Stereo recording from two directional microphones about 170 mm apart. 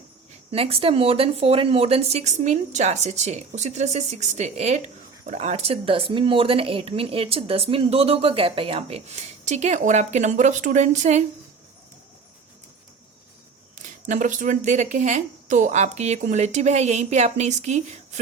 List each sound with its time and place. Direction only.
0.5 s speech: 35° right (ahead or behind)
13.7 s speech: 45° right (ahead or behind)